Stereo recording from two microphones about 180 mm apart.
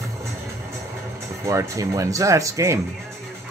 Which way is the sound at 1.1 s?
15° right (ahead or behind).